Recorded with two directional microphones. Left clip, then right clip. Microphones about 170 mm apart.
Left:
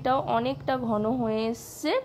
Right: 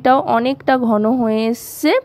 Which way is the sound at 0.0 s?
40° right (ahead or behind).